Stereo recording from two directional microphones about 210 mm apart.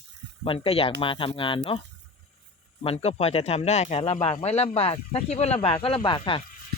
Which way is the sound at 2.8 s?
30° left (ahead or behind).